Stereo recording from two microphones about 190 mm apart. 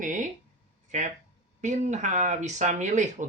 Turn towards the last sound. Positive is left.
turn(degrees=-40)  # may be behind; listen again after turning